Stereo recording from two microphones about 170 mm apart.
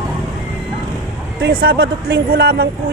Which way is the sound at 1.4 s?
70° right (ahead or behind).